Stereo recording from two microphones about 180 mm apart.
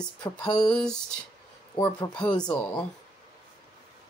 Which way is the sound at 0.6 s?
5° left (ahead or behind).